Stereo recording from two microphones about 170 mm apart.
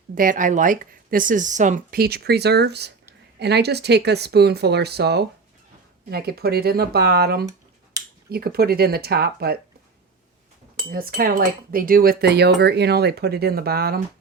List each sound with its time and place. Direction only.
0.1 s speech: 55° right (ahead or behind)
10.9 s speech: 60° right (ahead or behind)